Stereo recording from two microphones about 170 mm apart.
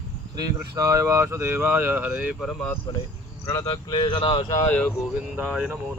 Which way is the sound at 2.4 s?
5° left (ahead or behind).